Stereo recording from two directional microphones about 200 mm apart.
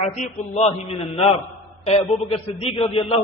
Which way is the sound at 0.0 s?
35° left (ahead or behind).